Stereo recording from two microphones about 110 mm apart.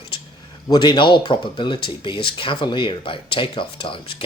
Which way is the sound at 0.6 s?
40° left (ahead or behind).